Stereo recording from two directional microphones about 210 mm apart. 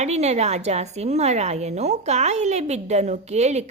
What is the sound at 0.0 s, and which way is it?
Speech, 30° right (ahead or behind).